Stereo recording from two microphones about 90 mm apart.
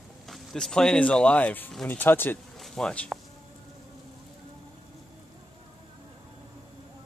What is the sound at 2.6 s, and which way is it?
Speech, 5° left (ahead or behind).